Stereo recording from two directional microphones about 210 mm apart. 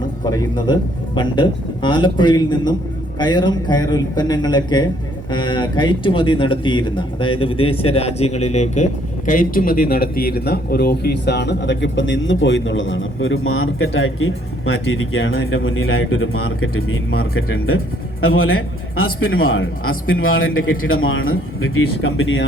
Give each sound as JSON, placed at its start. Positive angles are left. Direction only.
{"t": 0.3, "sound": "a man's voice", "side_deg": 20}